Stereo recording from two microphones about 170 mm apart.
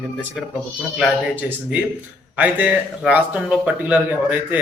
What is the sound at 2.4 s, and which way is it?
Speech, 10° right (ahead or behind).